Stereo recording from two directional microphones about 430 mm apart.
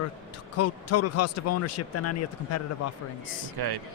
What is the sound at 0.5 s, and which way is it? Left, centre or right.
Speech, left.